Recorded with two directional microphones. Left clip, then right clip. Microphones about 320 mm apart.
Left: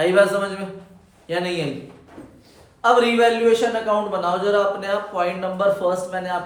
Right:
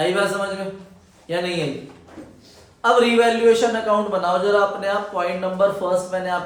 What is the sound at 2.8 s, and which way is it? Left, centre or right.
A man's voice, centre.